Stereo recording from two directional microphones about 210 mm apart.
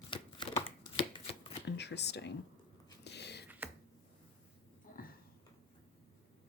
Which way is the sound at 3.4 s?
10° right (ahead or behind).